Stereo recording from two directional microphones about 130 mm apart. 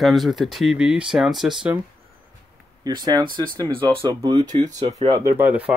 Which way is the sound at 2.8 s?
30° right (ahead or behind).